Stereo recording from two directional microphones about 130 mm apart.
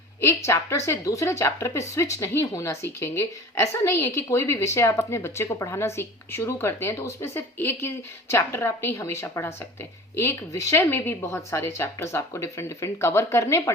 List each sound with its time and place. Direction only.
0.2 s a woman's voice: 20° left (ahead or behind)